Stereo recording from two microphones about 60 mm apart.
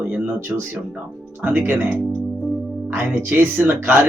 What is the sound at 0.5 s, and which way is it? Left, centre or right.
Speech, centre.